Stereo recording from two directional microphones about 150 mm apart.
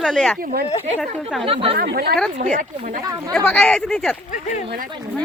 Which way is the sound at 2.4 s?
55° right (ahead or behind).